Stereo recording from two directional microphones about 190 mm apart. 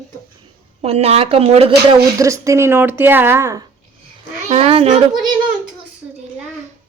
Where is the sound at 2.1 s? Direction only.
15° right (ahead or behind).